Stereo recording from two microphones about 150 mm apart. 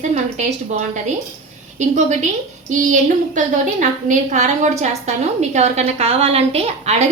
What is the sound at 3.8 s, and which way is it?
A woman's voice, 55° right (ahead or behind).